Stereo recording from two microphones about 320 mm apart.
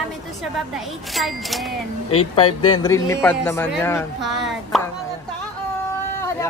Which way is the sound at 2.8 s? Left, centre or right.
Centre.